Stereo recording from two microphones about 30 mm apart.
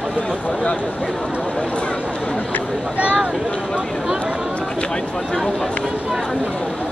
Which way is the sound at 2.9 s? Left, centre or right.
Right.